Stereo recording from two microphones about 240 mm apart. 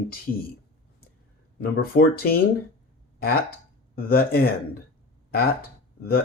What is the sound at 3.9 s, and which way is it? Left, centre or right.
Speech, left.